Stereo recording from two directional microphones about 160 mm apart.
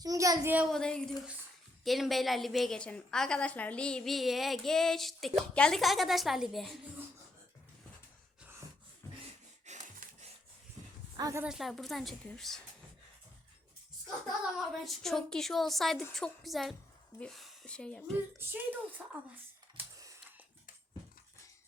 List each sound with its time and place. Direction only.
0.0 s speech: 20° right (ahead or behind)
0.7 s a woman's voice: 5° left (ahead or behind)
9.6 s wheeze: 45° right (ahead or behind)
11.2 s speech: 20° right (ahead or behind)
11.4 s a woman's voice: centre (ahead or behind)
14.5 s a woman's voice: centre (ahead or behind)
18.3 s speech: 10° right (ahead or behind)
19.7 s a sound: 20° right (ahead or behind)